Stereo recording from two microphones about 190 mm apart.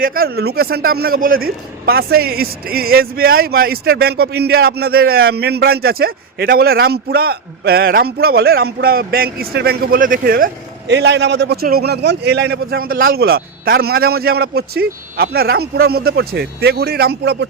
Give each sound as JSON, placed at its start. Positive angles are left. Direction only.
{"t": 0.0, "sound": "speech", "side_deg": -50}